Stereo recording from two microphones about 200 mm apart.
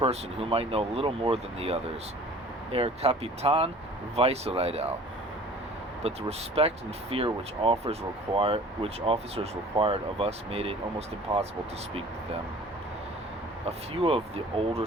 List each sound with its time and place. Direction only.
0.0 s speech: 30° right (ahead or behind)
6.0 s speech: 30° right (ahead or behind)
13.7 s speech: 30° right (ahead or behind)